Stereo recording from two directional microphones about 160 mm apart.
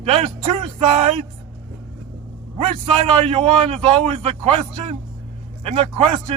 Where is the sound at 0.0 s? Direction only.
40° right (ahead or behind).